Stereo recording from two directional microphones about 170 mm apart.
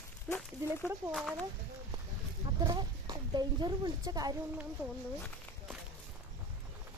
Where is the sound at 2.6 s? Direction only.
25° right (ahead or behind).